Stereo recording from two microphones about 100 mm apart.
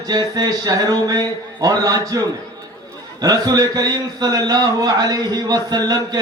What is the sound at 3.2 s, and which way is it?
A man's voice, 35° right (ahead or behind).